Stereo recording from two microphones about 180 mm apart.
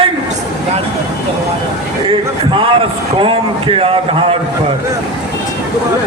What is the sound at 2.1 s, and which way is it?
A man's voice, 30° right (ahead or behind).